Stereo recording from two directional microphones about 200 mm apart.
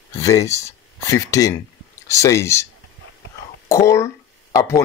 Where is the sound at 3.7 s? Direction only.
15° left (ahead or behind).